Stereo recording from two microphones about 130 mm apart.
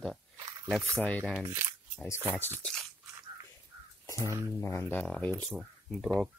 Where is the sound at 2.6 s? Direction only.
5° left (ahead or behind).